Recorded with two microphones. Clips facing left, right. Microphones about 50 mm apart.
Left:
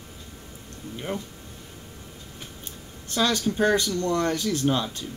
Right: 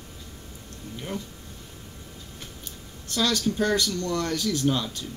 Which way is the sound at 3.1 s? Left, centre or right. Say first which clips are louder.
Left 1 dB; left.